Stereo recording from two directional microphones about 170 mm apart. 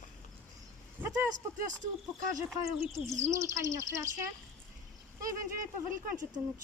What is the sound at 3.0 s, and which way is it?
Speech, 15° right (ahead or behind).